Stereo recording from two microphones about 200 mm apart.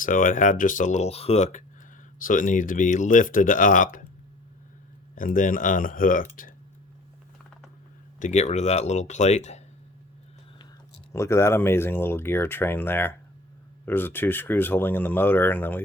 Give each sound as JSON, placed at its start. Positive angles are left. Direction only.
{"t": 0.0, "sound": "speech", "side_deg": 40}
{"t": 5.1, "sound": "speech", "side_deg": 40}
{"t": 8.2, "sound": "speech", "side_deg": 35}
{"t": 11.1, "sound": "speech", "side_deg": 15}